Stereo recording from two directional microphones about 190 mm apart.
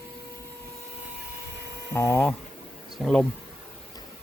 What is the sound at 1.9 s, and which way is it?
Speech, 10° left (ahead or behind).